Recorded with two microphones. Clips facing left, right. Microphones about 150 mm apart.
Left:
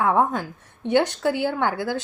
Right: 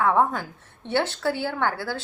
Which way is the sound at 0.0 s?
15° left (ahead or behind).